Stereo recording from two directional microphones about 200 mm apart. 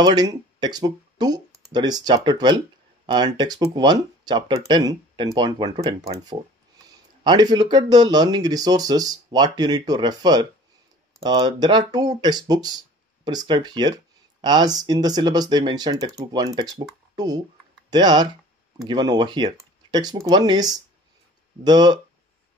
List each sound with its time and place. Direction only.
0.0 s speech: 20° right (ahead or behind)
7.2 s speech: 20° right (ahead or behind)